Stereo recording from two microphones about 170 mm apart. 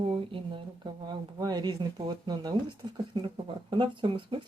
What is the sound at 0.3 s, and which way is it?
Speech, 30° right (ahead or behind).